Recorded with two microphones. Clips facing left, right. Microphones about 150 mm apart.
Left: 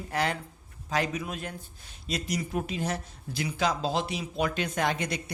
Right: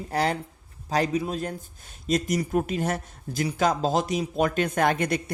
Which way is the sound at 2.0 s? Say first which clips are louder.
Right 7 dB; 45° right (ahead or behind).